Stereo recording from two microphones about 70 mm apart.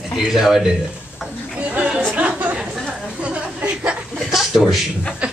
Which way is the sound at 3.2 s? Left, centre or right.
Centre.